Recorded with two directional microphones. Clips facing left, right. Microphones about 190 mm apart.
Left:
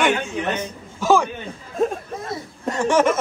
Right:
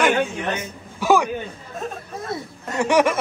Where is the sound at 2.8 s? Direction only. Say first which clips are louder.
Even; 15° right (ahead or behind).